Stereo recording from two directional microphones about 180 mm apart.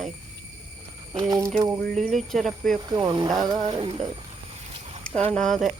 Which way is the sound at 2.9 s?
20° right (ahead or behind).